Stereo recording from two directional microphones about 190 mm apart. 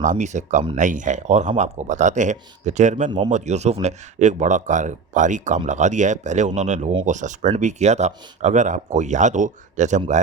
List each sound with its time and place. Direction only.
0.0 s speech: 40° right (ahead or behind)